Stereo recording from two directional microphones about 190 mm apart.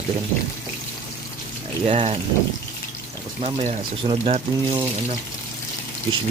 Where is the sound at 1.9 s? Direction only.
35° right (ahead or behind).